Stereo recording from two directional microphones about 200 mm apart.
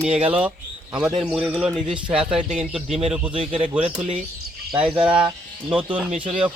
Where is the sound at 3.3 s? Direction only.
25° right (ahead or behind).